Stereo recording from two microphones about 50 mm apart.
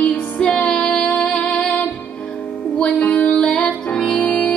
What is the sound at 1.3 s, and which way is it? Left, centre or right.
Music, centre.